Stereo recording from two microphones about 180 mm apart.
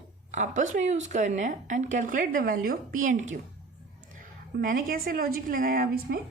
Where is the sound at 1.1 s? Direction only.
40° right (ahead or behind).